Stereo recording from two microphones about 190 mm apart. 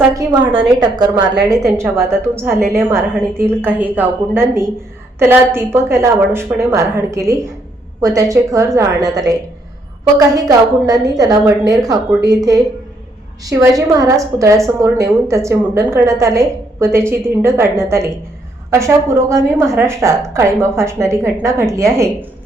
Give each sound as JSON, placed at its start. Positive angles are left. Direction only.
{"t": 0.1, "sound": "a woman's voice", "side_deg": -20}
{"t": 19.3, "sound": "a woman's voice", "side_deg": -15}